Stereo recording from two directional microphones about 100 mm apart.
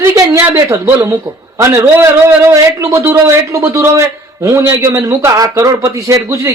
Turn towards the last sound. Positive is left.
turn(degrees=-30)  # may be behind; listen again after turning